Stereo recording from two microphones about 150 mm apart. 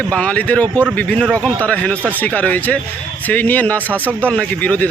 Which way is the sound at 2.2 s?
10° left (ahead or behind).